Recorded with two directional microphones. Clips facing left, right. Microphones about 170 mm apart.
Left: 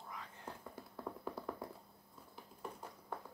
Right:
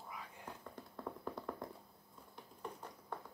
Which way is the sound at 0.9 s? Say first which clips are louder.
Even; 5° left (ahead or behind).